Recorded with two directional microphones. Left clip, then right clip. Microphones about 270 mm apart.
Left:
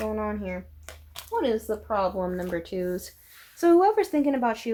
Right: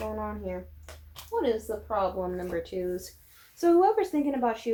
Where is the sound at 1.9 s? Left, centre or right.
Left.